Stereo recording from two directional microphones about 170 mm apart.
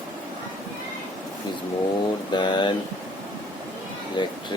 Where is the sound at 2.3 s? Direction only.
25° left (ahead or behind).